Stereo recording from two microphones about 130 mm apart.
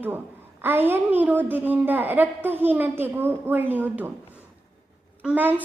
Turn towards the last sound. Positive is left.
turn(degrees=-10)  # may be behind; listen again after turning